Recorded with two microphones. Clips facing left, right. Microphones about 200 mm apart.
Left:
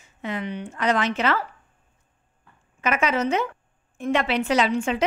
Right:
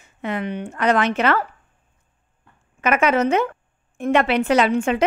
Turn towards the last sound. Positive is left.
turn(degrees=-55)  # may be behind; listen again after turning